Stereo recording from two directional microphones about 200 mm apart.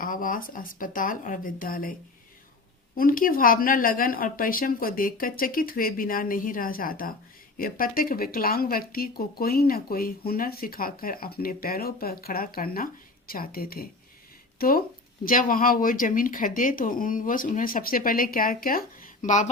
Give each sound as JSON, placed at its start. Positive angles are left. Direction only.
{"t": 0.0, "sound": "speech", "side_deg": 45}
{"t": 15.2, "sound": "speech", "side_deg": 45}